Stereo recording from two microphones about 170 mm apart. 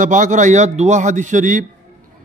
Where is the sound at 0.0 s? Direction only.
45° right (ahead or behind).